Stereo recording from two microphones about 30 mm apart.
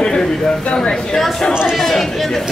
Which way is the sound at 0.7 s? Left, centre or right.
Left.